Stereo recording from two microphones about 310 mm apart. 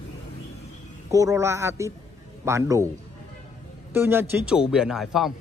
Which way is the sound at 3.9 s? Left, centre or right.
Centre.